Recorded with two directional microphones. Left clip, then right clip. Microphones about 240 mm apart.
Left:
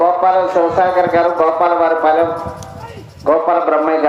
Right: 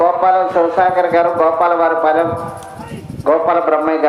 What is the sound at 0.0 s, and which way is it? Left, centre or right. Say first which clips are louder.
A man's voice: even; centre.